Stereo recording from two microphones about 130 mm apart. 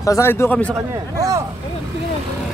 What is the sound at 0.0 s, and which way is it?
Speech, 20° left (ahead or behind).